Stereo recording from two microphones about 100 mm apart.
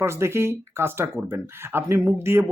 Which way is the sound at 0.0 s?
25° right (ahead or behind).